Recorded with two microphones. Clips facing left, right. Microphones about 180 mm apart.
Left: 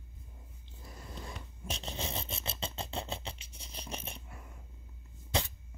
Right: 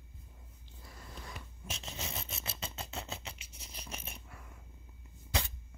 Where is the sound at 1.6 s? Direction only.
30° left (ahead or behind).